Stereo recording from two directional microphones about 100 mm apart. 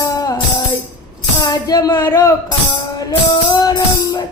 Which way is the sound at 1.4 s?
40° left (ahead or behind).